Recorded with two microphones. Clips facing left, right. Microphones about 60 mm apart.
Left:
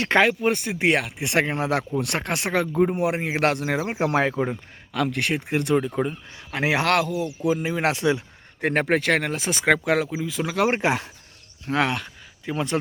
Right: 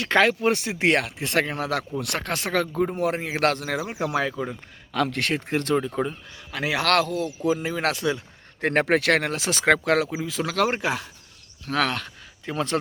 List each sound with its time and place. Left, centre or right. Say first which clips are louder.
0.2 s speech: right 1 dB; centre
1.3 s speech: left 3 dB; left
4.9 s speech: even; centre
6.3 s speech: left 4 dB; left
6.9 s speech: even; centre
7.6 s speech: left 2 dB; centre
8.6 s speech: right 1 dB; centre
10.7 s speech: left 3 dB; left
11.6 s speech: left 1 dB; centre